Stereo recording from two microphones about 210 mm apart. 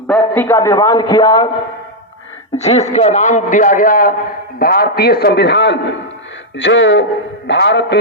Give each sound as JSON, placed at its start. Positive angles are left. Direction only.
{"t": 0.1, "sound": "a man's voice", "side_deg": 10}
{"t": 2.6, "sound": "a man's voice", "side_deg": 30}